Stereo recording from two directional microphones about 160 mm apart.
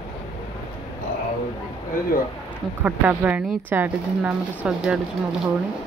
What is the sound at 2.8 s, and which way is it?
Speech, 10° right (ahead or behind).